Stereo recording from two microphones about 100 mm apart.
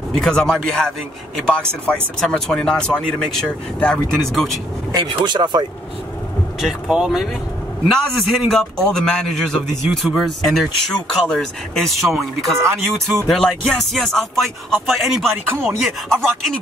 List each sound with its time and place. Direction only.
0.1 s speech: 5° left (ahead or behind)
4.9 s speech: 50° right (ahead or behind)
6.6 s speech: 5° right (ahead or behind)
15.4 s a sound: 25° right (ahead or behind)
15.8 s speech: 5° left (ahead or behind)